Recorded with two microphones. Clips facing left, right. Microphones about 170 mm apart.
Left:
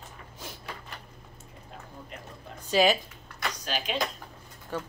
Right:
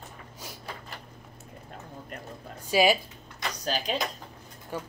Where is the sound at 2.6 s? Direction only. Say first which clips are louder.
Right 1 dB; 10° right (ahead or behind).